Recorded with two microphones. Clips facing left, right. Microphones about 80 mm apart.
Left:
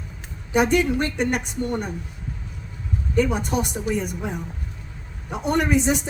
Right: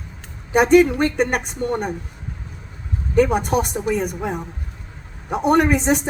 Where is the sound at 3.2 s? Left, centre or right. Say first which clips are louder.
Right 5 dB; right.